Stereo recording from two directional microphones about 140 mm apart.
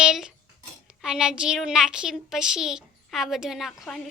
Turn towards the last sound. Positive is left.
turn(degrees=0)  # may be behind; listen again after turning